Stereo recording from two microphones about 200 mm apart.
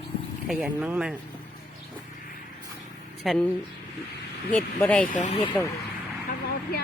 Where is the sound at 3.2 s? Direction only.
5° left (ahead or behind).